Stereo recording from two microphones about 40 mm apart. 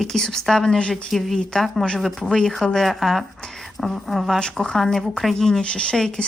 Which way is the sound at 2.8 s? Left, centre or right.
Centre.